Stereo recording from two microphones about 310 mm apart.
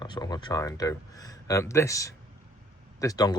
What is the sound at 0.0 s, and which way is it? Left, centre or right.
Speech, centre.